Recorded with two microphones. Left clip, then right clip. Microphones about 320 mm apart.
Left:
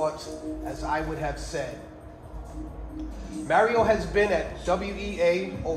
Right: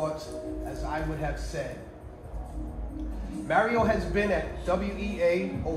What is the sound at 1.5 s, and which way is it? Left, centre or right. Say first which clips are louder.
Speech: left 3 dB; left.